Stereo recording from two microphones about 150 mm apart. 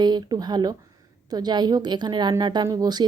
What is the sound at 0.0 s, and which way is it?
Speech, 30° right (ahead or behind).